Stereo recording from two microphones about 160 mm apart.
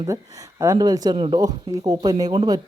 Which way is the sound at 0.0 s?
20° right (ahead or behind).